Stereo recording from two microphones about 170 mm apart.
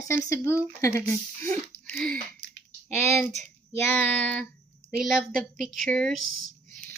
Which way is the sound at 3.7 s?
10° left (ahead or behind).